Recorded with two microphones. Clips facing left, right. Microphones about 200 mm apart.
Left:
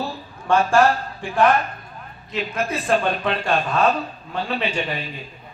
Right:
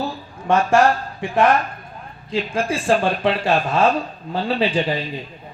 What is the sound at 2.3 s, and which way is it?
Speech, 30° right (ahead or behind).